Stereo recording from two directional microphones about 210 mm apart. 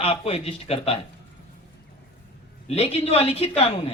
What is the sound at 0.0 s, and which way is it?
Speech, 30° left (ahead or behind).